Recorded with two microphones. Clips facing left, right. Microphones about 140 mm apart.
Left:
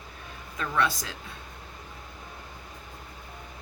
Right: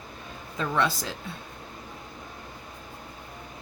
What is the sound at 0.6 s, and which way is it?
Speech, 25° right (ahead or behind).